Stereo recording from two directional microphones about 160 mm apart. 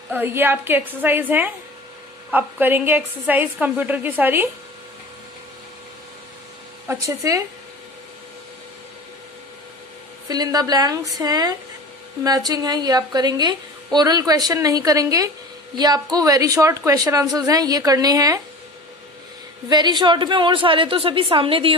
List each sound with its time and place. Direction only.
0.1 s a woman's voice: 10° right (ahead or behind)
6.9 s a woman's voice: 20° right (ahead or behind)
10.2 s a woman's voice: 25° right (ahead or behind)
19.7 s a woman's voice: 25° right (ahead or behind)